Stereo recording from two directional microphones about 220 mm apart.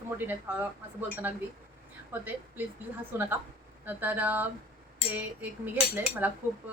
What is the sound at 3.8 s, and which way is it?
Speech, 10° right (ahead or behind).